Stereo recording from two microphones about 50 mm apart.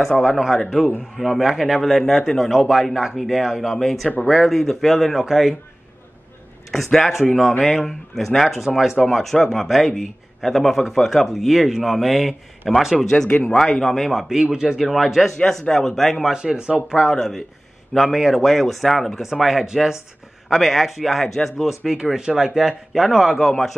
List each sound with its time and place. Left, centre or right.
0.2 s a man's voice: centre
6.7 s a man's voice: centre
13.1 s speech: centre
14.4 s a man's voice: centre
15.3 s speech: centre
16.3 s a man's voice: centre
17.1 s speech: centre
17.9 s a man's voice: centre